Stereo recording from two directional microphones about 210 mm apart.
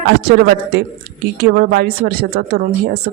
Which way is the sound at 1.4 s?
45° right (ahead or behind).